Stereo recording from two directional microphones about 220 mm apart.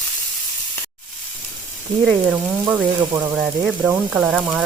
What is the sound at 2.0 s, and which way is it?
Speech, 5° right (ahead or behind).